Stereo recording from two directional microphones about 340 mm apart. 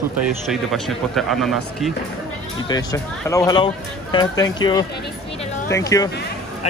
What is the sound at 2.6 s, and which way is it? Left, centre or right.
A man's voice, centre.